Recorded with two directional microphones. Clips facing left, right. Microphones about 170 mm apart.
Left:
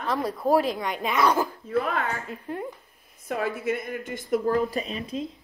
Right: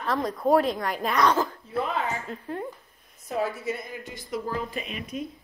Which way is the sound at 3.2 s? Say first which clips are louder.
Left 1 dB; 55° left (ahead or behind).